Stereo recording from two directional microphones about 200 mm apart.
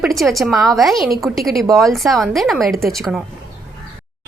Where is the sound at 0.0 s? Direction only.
Centre (ahead or behind).